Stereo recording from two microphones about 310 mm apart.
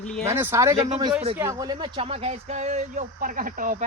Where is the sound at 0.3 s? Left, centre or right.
Centre.